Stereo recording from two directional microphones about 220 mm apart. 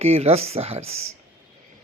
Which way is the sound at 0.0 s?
30° right (ahead or behind).